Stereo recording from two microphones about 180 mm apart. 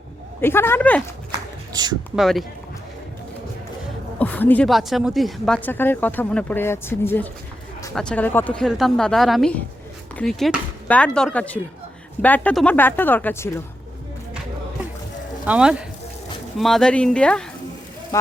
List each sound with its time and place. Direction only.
0.4 s a woman's voice: 15° left (ahead or behind)
1.7 s speech: 25° right (ahead or behind)
2.1 s speech: centre (ahead or behind)
4.2 s a woman's voice: 10° left (ahead or behind)
15.4 s speech: 5° right (ahead or behind)